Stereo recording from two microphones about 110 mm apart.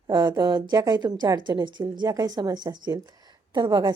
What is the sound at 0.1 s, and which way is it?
A woman's voice, 45° right (ahead or behind).